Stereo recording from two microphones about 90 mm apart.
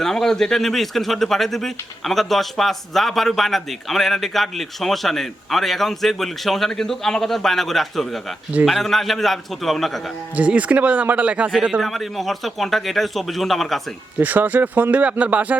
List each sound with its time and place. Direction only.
0.0 s speech: 5° left (ahead or behind)
10.3 s speech: 15° right (ahead or behind)
11.8 s speech: centre (ahead or behind)
14.2 s speech: 20° right (ahead or behind)